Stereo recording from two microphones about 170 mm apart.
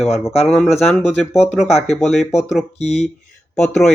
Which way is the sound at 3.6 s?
5° left (ahead or behind).